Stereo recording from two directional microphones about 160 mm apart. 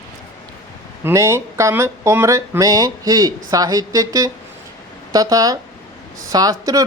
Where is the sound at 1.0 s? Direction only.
15° right (ahead or behind).